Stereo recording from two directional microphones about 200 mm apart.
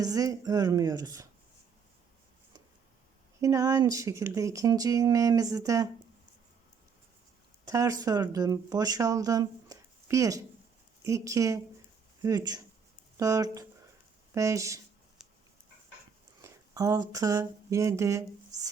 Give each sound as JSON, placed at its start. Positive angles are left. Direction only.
{"t": 0.0, "sound": "speech", "side_deg": -15}
{"t": 3.4, "sound": "speech", "side_deg": -15}
{"t": 7.7, "sound": "speech", "side_deg": -15}
{"t": 15.2, "sound": "a sound", "side_deg": 0}
{"t": 16.4, "sound": "speech", "side_deg": -15}